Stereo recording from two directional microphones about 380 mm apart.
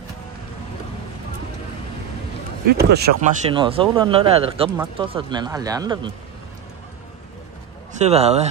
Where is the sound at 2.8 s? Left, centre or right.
Right.